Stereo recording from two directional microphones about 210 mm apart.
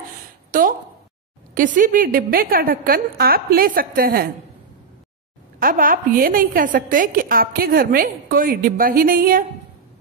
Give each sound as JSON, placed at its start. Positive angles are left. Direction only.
{"t": 0.5, "sound": "a woman's voice", "side_deg": -40}
{"t": 5.6, "sound": "a woman's voice", "side_deg": -40}